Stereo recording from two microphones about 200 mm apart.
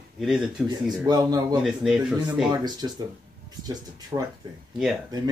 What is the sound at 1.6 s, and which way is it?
Speech, centre (ahead or behind).